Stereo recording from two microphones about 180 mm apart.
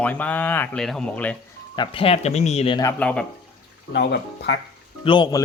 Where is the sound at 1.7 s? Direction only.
30° left (ahead or behind).